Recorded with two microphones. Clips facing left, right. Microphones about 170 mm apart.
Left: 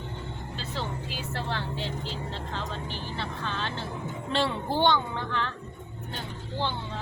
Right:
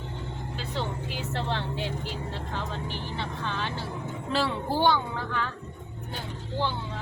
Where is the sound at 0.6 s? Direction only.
20° right (ahead or behind).